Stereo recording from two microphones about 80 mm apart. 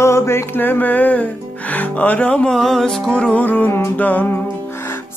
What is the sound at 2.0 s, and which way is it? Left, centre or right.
Music, centre.